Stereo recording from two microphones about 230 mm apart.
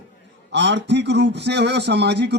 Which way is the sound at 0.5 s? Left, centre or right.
Right.